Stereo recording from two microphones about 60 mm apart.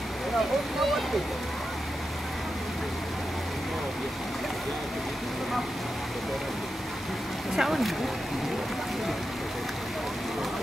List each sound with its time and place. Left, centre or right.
7.5 s speech: centre